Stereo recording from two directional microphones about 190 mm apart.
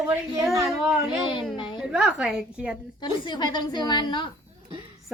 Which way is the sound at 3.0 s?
25° left (ahead or behind).